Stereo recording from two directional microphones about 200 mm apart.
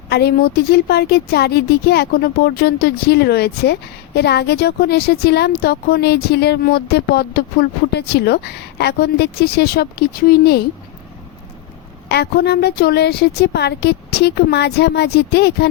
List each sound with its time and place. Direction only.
0.1 s a woman's voice: 55° left (ahead or behind)
12.0 s a woman's voice: 55° left (ahead or behind)